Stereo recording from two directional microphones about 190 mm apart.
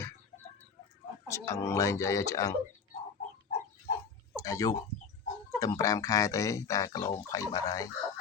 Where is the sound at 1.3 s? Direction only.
15° left (ahead or behind).